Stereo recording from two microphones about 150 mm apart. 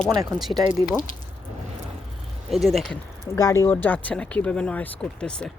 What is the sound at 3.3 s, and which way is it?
Speech, 20° left (ahead or behind).